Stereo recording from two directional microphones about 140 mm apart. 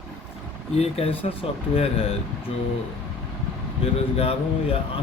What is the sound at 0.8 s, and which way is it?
Speech, 45° left (ahead or behind).